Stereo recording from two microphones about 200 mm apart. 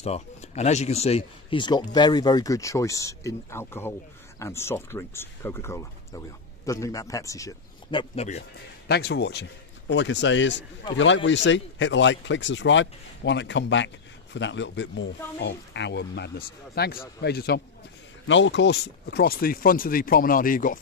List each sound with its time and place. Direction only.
0.0 s speech: 30° left (ahead or behind)
8.4 s speech: 55° left (ahead or behind)
18.2 s speech: 70° left (ahead or behind); by 20.8 s 45° left (ahead or behind)